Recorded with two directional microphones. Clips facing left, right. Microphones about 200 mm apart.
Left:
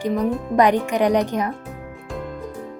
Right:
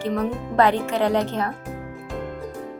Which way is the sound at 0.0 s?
10° left (ahead or behind).